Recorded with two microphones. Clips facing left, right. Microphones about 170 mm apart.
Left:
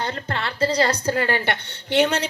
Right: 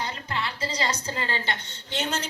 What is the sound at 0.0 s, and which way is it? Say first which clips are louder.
A woman's voice: left 4 dB; 60° left (ahead or behind).